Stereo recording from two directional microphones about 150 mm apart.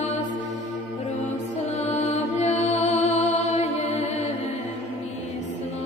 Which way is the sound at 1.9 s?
50° left (ahead or behind).